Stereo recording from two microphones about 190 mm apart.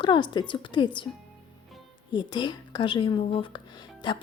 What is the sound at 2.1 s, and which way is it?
A woman's voice, 25° left (ahead or behind).